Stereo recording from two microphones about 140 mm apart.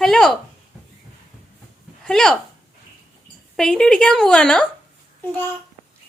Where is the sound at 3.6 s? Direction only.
5° left (ahead or behind).